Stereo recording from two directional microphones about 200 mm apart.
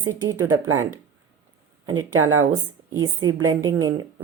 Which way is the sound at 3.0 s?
15° right (ahead or behind).